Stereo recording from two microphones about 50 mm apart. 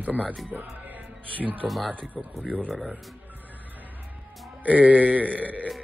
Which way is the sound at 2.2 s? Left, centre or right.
Centre.